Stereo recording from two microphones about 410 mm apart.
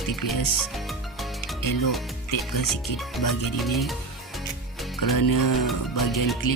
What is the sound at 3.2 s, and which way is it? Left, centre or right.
Speech, left.